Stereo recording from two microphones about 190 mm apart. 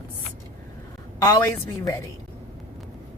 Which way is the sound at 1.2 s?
15° left (ahead or behind).